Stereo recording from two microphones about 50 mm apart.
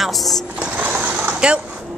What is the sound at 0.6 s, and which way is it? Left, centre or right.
Sewing machine, right.